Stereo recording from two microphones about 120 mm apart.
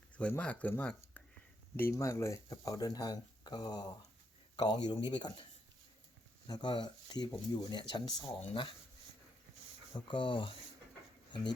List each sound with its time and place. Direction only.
0.2 s speech: 10° left (ahead or behind); by 5.5 s 45° left (ahead or behind)
6.5 s speech: 40° left (ahead or behind)
9.9 s speech: 45° left (ahead or behind)